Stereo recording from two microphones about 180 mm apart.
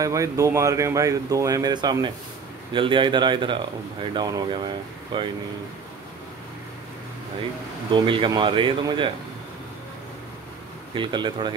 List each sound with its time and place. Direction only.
0.0 s speech: 15° right (ahead or behind)
7.9 s speech: 25° right (ahead or behind)
11.0 s speech: 25° right (ahead or behind)